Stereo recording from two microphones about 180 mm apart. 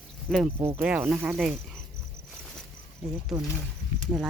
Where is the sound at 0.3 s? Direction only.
5° left (ahead or behind).